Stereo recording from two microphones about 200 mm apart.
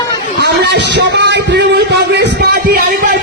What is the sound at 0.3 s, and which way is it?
A man's voice, 55° right (ahead or behind).